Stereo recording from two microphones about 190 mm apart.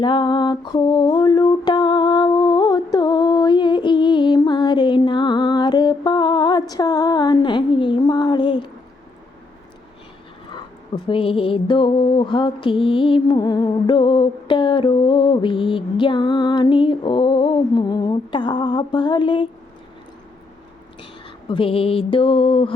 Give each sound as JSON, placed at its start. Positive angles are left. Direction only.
{"t": 0.0, "sound": "mantra", "side_deg": 25}
{"t": 10.9, "sound": "mantra", "side_deg": 25}
{"t": 21.4, "sound": "mantra", "side_deg": 25}